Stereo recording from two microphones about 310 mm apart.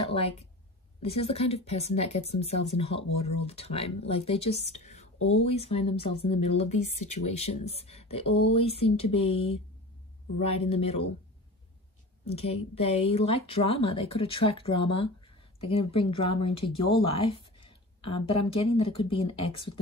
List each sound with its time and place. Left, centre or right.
0.1 s a woman's voice: centre
12.3 s a woman's voice: centre